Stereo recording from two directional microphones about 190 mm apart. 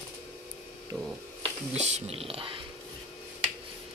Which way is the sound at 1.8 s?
30° right (ahead or behind).